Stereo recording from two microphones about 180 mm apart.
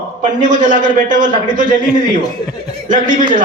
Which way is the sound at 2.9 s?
45° right (ahead or behind).